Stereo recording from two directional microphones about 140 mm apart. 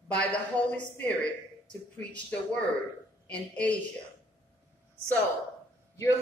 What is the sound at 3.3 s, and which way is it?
Speech, 10° left (ahead or behind).